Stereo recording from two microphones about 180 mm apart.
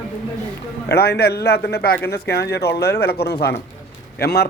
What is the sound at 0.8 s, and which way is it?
A man's voice, 65° left (ahead or behind).